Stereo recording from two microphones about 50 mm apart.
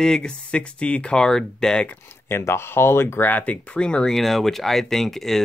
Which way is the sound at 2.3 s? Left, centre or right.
Left.